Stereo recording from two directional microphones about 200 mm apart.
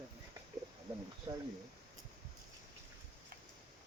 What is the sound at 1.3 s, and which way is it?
Speech, 25° right (ahead or behind).